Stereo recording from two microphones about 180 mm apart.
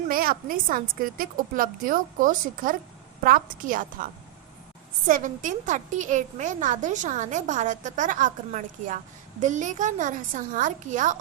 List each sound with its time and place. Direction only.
0.1 s a woman's voice: 55° right (ahead or behind)